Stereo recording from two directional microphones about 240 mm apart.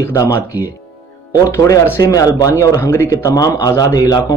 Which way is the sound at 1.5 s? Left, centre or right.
Centre.